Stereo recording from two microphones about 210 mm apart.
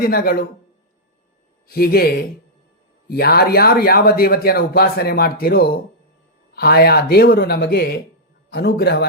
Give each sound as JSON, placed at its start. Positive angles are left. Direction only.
{"t": 0.0, "sound": "speech", "side_deg": 45}
{"t": 1.6, "sound": "speech", "side_deg": 45}